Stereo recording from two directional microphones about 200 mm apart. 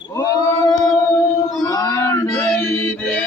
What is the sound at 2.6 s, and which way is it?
Music, 10° left (ahead or behind).